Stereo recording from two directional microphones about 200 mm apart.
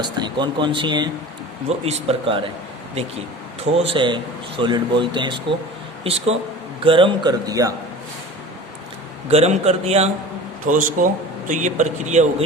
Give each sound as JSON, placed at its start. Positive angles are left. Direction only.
{"t": 0.0, "sound": "a man's voice", "side_deg": -20}
{"t": 3.8, "sound": "a man's voice", "side_deg": -25}
{"t": 9.3, "sound": "speech", "side_deg": -30}